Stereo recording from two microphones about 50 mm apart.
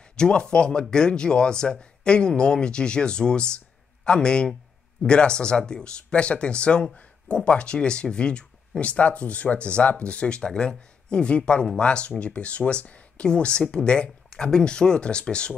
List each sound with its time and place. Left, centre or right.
0.1 s speech: centre